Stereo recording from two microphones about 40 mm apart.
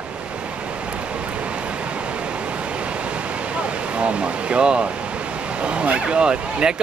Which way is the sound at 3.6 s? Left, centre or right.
Right.